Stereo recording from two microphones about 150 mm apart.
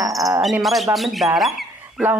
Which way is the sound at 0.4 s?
Centre (ahead or behind).